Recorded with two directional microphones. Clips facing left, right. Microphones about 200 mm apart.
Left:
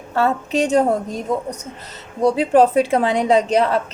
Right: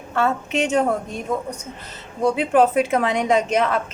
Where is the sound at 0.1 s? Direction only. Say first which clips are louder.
Left 3 dB; 35° left (ahead or behind).